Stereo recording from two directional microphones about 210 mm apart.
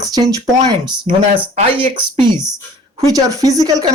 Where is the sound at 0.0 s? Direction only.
15° right (ahead or behind).